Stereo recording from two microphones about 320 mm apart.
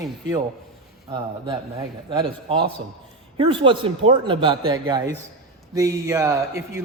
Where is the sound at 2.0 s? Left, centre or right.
Centre.